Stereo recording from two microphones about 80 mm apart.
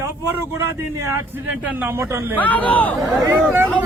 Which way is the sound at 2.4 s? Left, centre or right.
Centre.